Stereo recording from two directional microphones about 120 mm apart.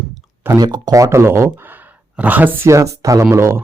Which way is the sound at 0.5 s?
35° right (ahead or behind).